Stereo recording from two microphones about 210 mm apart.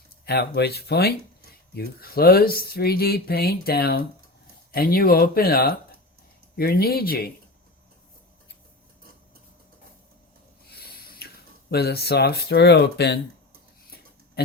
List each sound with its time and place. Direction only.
0.3 s speech: 50° left (ahead or behind)
10.7 s a sound: 50° left (ahead or behind)
11.7 s speech: 50° left (ahead or behind)